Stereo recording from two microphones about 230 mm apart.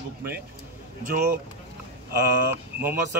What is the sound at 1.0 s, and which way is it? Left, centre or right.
Speech, right.